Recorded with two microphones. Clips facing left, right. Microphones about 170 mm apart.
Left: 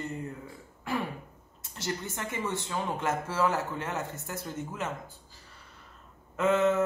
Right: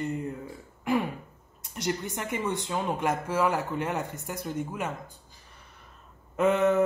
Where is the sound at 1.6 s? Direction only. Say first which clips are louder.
Right 4 dB; 15° right (ahead or behind).